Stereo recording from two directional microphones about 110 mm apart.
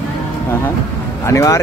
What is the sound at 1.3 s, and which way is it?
Speech, 30° left (ahead or behind).